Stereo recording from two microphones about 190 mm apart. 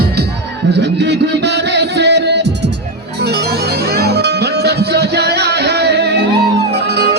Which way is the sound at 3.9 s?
55° right (ahead or behind).